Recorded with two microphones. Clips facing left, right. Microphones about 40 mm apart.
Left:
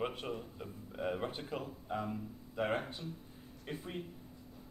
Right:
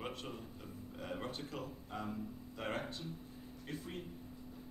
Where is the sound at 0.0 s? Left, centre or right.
Left.